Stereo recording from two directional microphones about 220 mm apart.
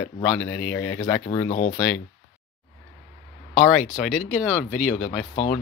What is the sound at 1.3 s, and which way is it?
Speech, 25° left (ahead or behind).